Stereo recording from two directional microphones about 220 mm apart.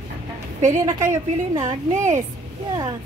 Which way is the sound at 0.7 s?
15° right (ahead or behind).